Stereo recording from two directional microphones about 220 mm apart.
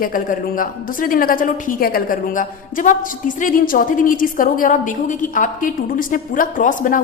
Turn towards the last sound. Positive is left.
turn(degrees=35)  # may be behind; listen again after turning